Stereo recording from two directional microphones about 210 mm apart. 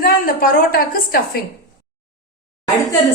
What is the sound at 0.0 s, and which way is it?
A woman's voice, 40° left (ahead or behind).